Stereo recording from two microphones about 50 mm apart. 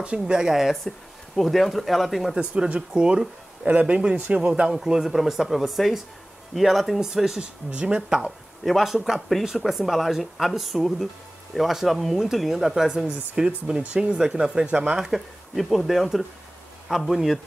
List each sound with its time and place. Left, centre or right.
0.3 s speech: centre
0.8 s speech: centre
2.3 s a man's voice: right
4.8 s speech: centre
7.7 s a man's voice: centre
8.6 s speech: centre
12.9 s a man's voice: centre
15.0 s speech: centre